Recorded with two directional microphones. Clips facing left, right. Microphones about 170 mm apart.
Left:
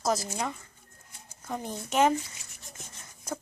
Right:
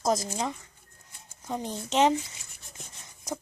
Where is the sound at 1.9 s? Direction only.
20° right (ahead or behind).